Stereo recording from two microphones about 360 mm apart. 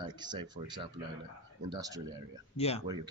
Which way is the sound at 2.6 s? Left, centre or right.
Centre.